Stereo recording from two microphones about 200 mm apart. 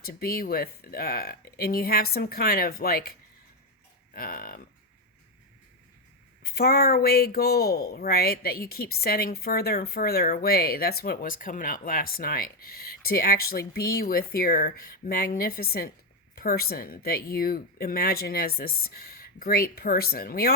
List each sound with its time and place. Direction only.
0.0 s speech: 50° left (ahead or behind)
6.4 s speech: 50° left (ahead or behind)